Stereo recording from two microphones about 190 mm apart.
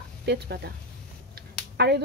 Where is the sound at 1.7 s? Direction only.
60° right (ahead or behind).